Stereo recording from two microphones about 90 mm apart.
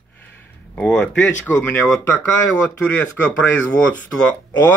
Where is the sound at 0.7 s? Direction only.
15° left (ahead or behind).